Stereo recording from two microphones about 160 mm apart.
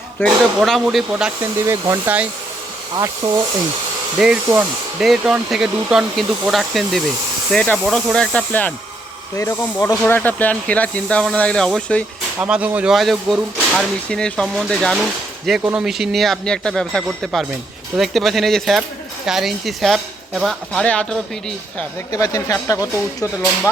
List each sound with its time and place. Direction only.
0.2 s speech: centre (ahead or behind)
1.6 s hair dryer: 20° right (ahead or behind)
3.2 s hair dryer: 25° right (ahead or behind)
4.2 s speech: 5° right (ahead or behind); by 9.9 s 15° left (ahead or behind)
9.9 s speech: 5° left (ahead or behind)
12.4 s speech: 10° right (ahead or behind); by 21.2 s 5° left (ahead or behind)
22.1 s speech: 20° left (ahead or behind)